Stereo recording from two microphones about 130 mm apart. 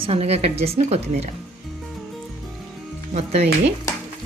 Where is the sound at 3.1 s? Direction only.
55° right (ahead or behind).